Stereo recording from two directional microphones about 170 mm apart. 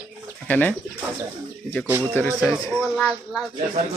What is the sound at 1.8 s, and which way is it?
Speech, 10° right (ahead or behind).